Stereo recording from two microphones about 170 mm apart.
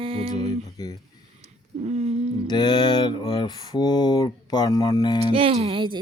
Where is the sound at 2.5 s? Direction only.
25° left (ahead or behind).